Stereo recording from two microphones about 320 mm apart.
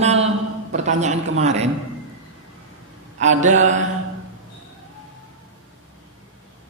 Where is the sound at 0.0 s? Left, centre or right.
Centre.